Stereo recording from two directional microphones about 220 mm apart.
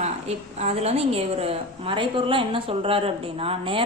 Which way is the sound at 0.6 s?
30° right (ahead or behind).